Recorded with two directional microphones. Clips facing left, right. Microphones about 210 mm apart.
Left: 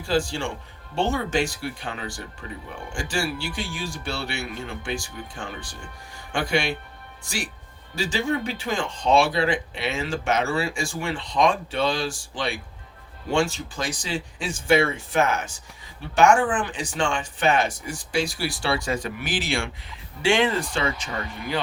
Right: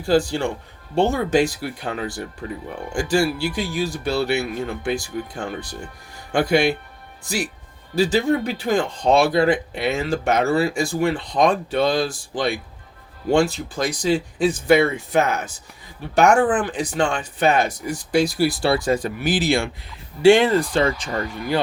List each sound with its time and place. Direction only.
0.1 s speech: 40° right (ahead or behind)